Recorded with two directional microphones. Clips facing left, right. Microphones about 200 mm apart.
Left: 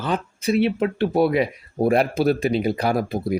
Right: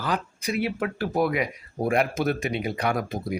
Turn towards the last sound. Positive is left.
turn(degrees=35)  # may be behind; listen again after turning